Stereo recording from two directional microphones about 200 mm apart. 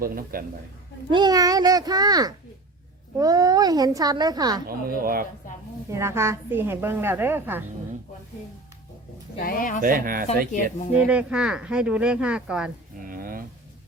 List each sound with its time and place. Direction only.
0.0 s speech: 45° right (ahead or behind)
1.1 s a child's voice: 20° right (ahead or behind)
4.9 s speech: 45° right (ahead or behind)
5.9 s a woman's voice: 15° right (ahead or behind)
9.4 s speech: 45° left (ahead or behind)
9.8 s speech: 45° right (ahead or behind)
10.9 s speech: 5° right (ahead or behind)
13.0 s a sound: 45° right (ahead or behind)